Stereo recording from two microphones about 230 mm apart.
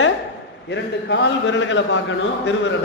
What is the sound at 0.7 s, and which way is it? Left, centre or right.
A man's voice, left.